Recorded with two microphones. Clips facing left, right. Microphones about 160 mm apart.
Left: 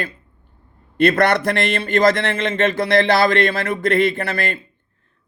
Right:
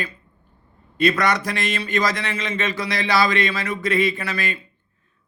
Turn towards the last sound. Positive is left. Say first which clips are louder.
# left 4 dB
turn(degrees=55)  # may be behind; listen again after turning